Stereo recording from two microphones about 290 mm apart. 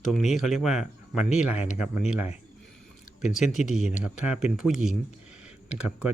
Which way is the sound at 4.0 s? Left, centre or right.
Centre.